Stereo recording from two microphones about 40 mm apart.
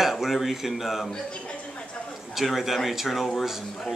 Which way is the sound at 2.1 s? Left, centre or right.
Centre.